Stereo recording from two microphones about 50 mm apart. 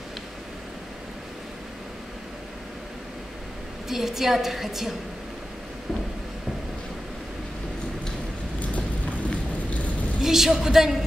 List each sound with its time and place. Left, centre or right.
3.9 s a woman's voice: centre
9.3 s a sound: left
10.2 s speech: centre